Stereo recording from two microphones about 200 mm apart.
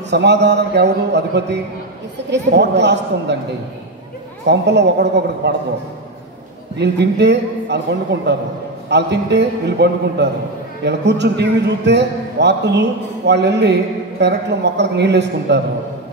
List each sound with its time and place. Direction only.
0.1 s a man's voice: 60° right (ahead or behind)
4.5 s a man's voice: 60° right (ahead or behind)
6.8 s a man's voice: 60° right (ahead or behind)